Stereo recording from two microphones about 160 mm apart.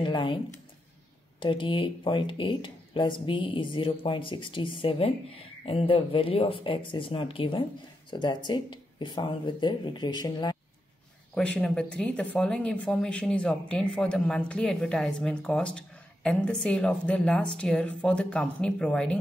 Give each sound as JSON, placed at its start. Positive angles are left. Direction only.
{"t": 0.0, "sound": "speech", "side_deg": 30}
{"t": 1.4, "sound": "speech", "side_deg": 30}
{"t": 11.3, "sound": "speech", "side_deg": 5}